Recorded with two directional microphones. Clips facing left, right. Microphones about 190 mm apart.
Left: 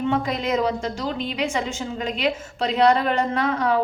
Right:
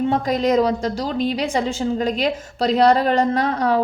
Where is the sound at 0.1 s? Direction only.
40° right (ahead or behind).